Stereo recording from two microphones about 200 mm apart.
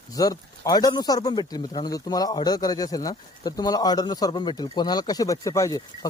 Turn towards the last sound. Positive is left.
turn(degrees=15)  # may be behind; listen again after turning